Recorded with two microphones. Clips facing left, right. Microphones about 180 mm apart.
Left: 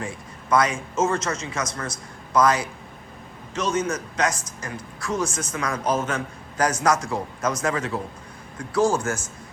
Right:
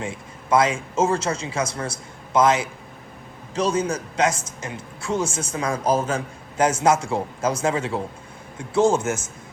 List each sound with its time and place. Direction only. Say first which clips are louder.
0.5 s a man's voice: right 2 dB; 25° right (ahead or behind)